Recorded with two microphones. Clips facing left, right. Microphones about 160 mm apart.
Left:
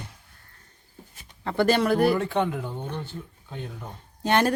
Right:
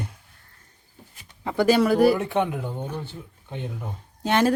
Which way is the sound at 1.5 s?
10° right (ahead or behind).